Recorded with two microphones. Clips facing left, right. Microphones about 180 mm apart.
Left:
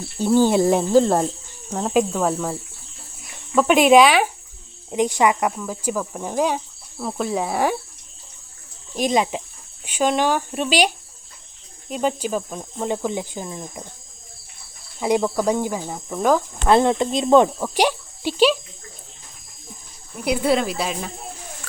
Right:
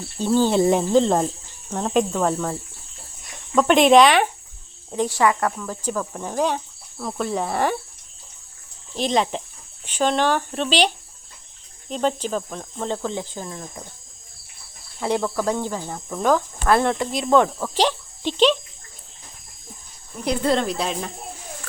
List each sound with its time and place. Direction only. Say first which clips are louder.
0.2 s speech: left 2 dB; 10° left (ahead or behind)
4.9 s speech: left 2 dB; 15° left (ahead or behind)
9.0 s speech: left 1 dB; 10° left (ahead or behind)
15.0 s speech: left 3 dB; 15° left (ahead or behind)
16.6 s speech: left 3 dB; 20° left (ahead or behind)
20.1 s speech: left 1 dB; 10° left (ahead or behind)